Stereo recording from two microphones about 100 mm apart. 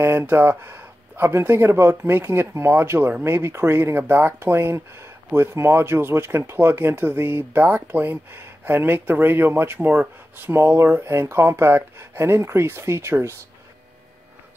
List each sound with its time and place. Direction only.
0.0 s speech: 25° right (ahead or behind)